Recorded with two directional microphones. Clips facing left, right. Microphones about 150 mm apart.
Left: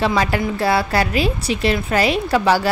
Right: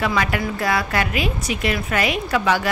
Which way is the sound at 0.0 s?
30° left (ahead or behind).